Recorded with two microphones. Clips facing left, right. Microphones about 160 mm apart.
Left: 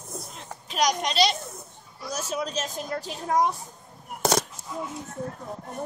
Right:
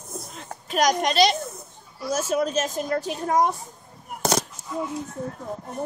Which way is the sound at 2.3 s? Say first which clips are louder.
Right 7 dB; 50° right (ahead or behind).